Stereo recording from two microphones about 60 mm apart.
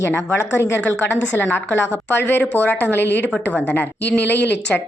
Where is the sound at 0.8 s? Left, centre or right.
Left.